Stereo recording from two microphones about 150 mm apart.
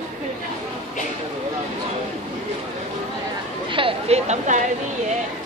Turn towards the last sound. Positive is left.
turn(degrees=-50)  # may be behind; listen again after turning